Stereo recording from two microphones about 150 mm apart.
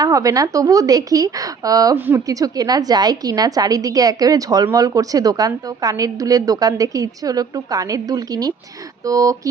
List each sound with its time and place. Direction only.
0.0 s a woman's voice: 25° right (ahead or behind)